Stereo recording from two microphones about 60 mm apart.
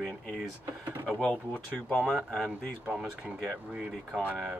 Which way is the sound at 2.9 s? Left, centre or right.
Centre.